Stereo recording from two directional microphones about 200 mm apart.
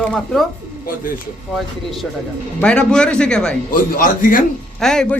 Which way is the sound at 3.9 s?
45° left (ahead or behind).